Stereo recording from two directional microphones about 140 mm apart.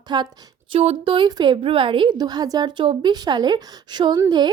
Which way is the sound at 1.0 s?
35° right (ahead or behind).